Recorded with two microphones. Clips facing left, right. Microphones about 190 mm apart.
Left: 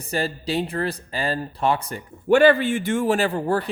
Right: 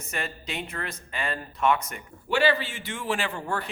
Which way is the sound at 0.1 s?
35° left (ahead or behind).